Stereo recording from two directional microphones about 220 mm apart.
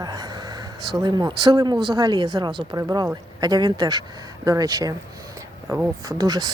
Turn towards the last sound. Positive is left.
turn(degrees=-15)  # may be behind; listen again after turning